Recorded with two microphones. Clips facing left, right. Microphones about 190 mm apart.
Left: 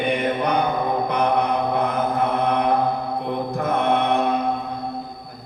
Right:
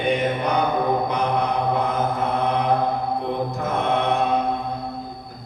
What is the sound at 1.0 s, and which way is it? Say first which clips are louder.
Mantra: left 2 dB; 60° left (ahead or behind).